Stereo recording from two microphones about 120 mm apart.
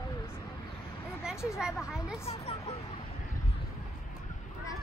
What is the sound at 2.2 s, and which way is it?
Speech, 60° left (ahead or behind).